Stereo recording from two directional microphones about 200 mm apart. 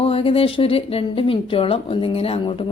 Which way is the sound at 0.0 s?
30° left (ahead or behind).